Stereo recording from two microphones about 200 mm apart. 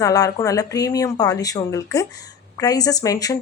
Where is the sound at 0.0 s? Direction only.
15° left (ahead or behind).